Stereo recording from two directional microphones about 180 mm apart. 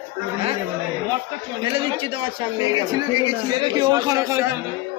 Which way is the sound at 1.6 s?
30° right (ahead or behind).